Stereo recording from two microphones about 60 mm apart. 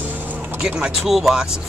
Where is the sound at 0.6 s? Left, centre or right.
Centre.